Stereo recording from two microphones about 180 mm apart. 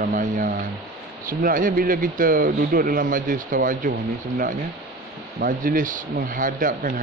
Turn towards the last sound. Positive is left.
turn(degrees=-50)  # may be behind; listen again after turning